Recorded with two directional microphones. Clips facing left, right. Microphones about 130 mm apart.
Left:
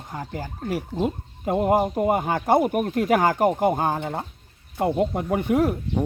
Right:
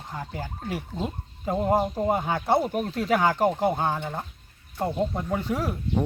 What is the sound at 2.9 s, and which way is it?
Speech, 50° left (ahead or behind).